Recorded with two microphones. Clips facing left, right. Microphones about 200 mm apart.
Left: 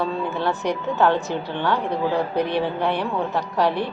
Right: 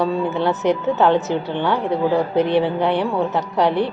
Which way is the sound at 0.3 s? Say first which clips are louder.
Right 5 dB; 20° right (ahead or behind).